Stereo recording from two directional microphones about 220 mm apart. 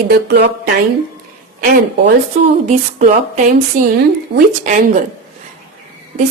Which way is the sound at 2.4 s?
35° right (ahead or behind).